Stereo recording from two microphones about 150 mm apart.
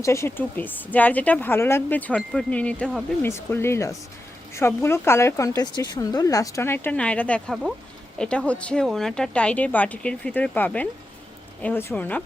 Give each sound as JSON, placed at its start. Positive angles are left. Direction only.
{"t": 0.0, "sound": "speech", "side_deg": 20}